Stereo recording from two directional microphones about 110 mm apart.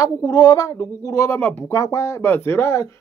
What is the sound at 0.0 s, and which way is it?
Speech, 35° left (ahead or behind).